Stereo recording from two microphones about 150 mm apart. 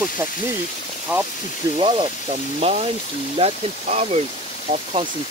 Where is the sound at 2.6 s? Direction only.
45° right (ahead or behind).